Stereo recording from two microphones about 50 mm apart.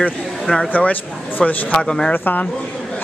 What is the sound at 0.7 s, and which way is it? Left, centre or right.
Speech, left.